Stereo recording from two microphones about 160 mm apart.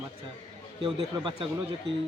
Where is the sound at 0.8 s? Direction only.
35° right (ahead or behind).